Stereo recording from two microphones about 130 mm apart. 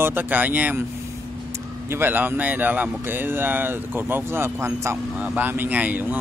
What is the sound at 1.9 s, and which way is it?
Speech, 15° right (ahead or behind).